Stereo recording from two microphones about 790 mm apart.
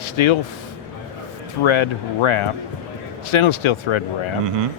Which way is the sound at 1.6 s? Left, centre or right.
Left.